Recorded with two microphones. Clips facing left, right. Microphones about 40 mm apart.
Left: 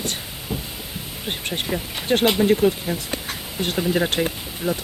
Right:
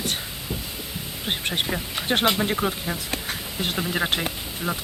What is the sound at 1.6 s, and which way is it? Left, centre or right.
Speech, centre.